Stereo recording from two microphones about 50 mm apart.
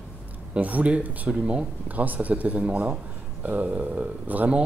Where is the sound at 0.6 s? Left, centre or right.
Right.